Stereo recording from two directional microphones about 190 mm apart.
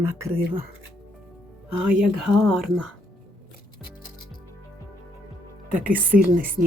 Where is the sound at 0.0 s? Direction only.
15° right (ahead or behind).